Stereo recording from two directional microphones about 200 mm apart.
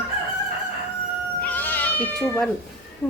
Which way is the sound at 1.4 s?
10° left (ahead or behind).